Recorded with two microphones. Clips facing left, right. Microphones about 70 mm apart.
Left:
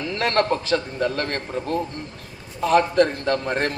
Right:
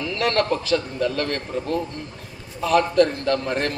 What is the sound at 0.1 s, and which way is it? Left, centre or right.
A man's voice, left.